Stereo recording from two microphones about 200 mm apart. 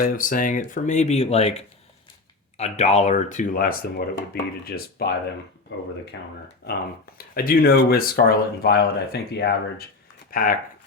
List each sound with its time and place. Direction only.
0.0 s speech: 45° left (ahead or behind)
5.7 s speech: 65° left (ahead or behind)
6.7 s speech: 50° left (ahead or behind)